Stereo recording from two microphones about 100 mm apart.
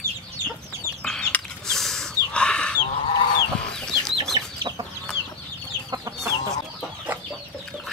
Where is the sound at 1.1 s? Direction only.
10° left (ahead or behind).